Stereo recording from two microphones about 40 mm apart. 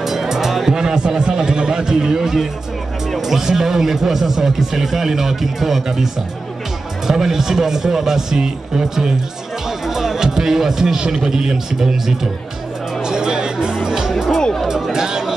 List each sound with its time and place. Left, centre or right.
0.0 s music: centre
0.7 s a man's voice: centre
7.1 s speech: centre
13.0 s music: centre
14.4 s chatter: centre
14.7 s chatter: centre